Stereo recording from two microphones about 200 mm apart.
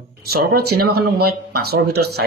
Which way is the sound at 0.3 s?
50° right (ahead or behind).